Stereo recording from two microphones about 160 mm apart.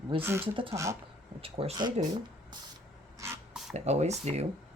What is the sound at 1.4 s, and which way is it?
Speech, 35° right (ahead or behind).